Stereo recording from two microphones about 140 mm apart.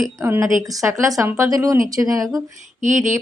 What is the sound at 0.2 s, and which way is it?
Speech, 20° right (ahead or behind).